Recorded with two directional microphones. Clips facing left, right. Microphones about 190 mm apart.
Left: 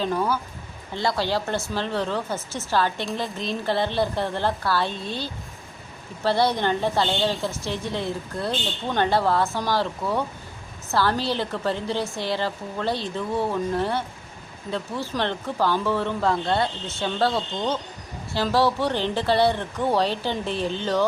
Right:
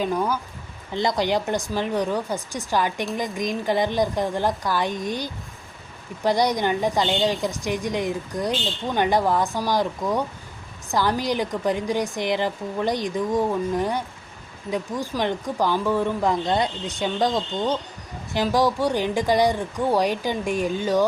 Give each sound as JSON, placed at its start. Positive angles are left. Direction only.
{"t": 0.0, "sound": "a woman's voice", "side_deg": -15}